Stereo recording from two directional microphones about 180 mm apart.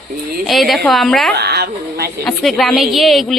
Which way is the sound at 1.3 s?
65° right (ahead or behind).